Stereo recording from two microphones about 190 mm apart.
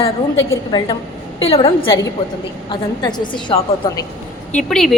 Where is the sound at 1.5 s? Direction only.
30° left (ahead or behind).